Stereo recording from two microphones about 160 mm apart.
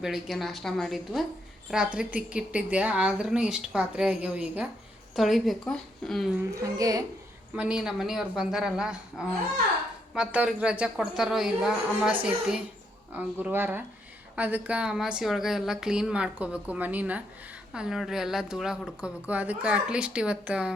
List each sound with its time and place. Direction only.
0.0 s a woman's voice: centre (ahead or behind)
6.5 s a woman's voice: 20° right (ahead or behind)
7.5 s a woman's voice: 5° right (ahead or behind)